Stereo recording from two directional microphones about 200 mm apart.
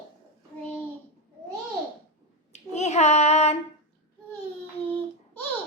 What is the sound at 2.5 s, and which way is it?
Child singing, 35° left (ahead or behind).